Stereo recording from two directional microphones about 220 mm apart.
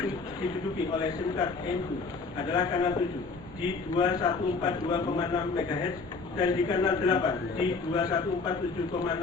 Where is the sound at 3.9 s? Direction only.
20° left (ahead or behind).